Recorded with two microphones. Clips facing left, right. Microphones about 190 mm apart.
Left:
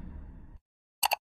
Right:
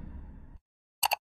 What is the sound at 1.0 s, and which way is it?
Plop, centre (ahead or behind).